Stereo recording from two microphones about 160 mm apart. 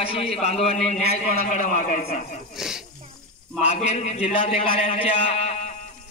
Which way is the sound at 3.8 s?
40° left (ahead or behind).